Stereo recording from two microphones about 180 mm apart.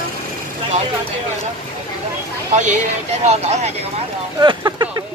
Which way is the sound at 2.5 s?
40° right (ahead or behind).